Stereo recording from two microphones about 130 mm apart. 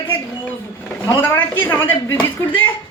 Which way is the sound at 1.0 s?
20° left (ahead or behind).